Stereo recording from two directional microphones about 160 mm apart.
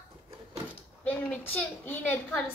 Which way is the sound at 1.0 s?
10° left (ahead or behind).